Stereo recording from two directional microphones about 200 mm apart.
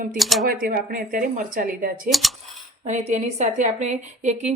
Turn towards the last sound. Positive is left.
turn(degrees=-35)  # may be behind; listen again after turning